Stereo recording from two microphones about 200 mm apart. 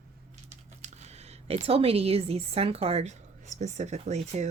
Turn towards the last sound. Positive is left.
turn(degrees=-35)  # may be behind; listen again after turning